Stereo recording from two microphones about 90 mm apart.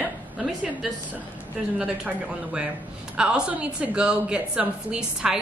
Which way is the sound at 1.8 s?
15° right (ahead or behind).